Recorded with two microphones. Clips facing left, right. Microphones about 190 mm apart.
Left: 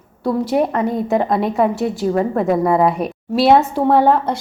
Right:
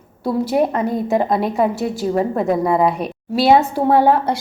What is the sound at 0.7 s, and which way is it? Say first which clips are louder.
A woman's voice: left 1 dB; centre (ahead or behind).